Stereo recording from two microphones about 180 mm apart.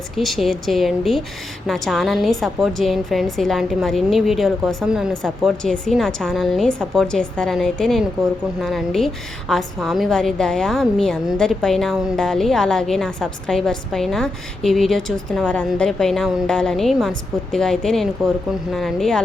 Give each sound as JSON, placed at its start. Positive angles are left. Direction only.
{"t": 0.2, "sound": "a woman's voice", "side_deg": 0}